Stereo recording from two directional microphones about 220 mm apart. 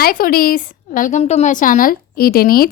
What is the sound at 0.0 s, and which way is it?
A woman's voice, 40° left (ahead or behind).